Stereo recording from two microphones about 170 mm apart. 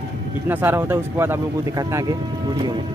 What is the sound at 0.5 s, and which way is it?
Speech, 10° right (ahead or behind).